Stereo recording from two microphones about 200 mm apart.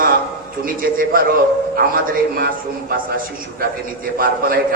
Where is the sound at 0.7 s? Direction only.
45° right (ahead or behind).